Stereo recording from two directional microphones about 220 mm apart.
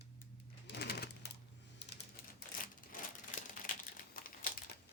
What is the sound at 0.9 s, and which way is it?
Sewing machine, 45° left (ahead or behind).